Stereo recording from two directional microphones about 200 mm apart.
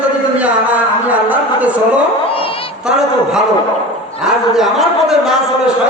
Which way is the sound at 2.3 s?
25° left (ahead or behind).